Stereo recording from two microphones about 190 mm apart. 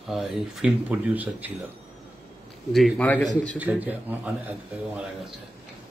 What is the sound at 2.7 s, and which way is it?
Speech, 5° left (ahead or behind).